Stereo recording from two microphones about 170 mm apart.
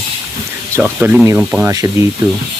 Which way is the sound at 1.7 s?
20° right (ahead or behind).